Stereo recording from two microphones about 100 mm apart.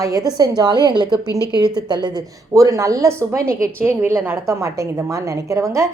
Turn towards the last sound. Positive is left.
turn(degrees=-30)  # may be behind; listen again after turning